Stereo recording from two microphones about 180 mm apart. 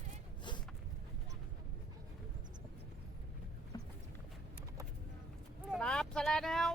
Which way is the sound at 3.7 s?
20° left (ahead or behind).